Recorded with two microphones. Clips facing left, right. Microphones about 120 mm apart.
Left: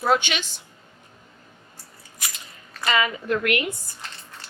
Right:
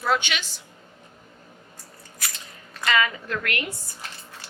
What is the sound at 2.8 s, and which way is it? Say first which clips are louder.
Speech: left 1 dB; 20° left (ahead or behind).